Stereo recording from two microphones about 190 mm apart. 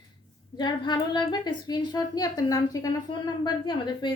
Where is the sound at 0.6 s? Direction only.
25° left (ahead or behind).